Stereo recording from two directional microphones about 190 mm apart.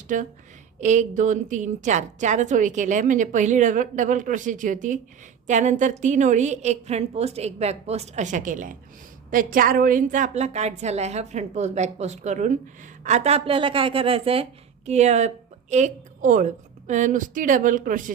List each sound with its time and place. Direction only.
0.1 s a woman's voice: 45° right (ahead or behind)